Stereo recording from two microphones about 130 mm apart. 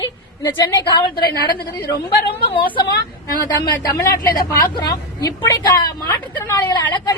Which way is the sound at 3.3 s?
30° left (ahead or behind).